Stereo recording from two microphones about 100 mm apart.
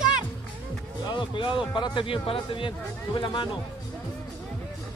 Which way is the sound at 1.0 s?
55° left (ahead or behind).